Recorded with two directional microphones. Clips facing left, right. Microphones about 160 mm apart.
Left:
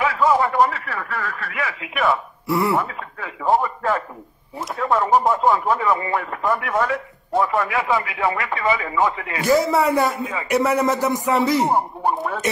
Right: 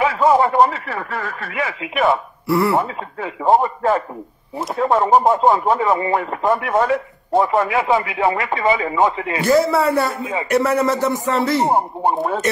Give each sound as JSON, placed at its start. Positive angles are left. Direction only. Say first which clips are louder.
{"t": 0.0, "sound": "speech", "louder": "right 3 dB", "side_deg": -25}
{"t": 2.4, "sound": "speech", "louder": "right 3 dB", "side_deg": 15}
{"t": 2.7, "sound": "speech", "louder": "right 3 dB", "side_deg": -25}
{"t": 9.5, "sound": "a man's voice", "louder": "right 2 dB", "side_deg": 15}
{"t": 11.7, "sound": "speech", "louder": "right 3 dB", "side_deg": -25}